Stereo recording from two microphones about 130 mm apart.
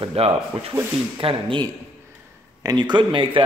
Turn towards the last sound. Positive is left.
turn(degrees=-40)  # may be behind; listen again after turning